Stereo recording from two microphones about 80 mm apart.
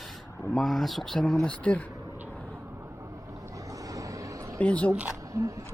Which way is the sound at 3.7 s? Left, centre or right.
Right.